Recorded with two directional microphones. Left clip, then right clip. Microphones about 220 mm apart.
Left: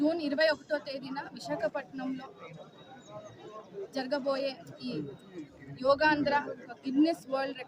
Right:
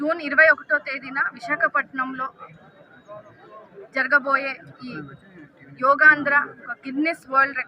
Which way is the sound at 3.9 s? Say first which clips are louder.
Right 14 dB; 15° left (ahead or behind).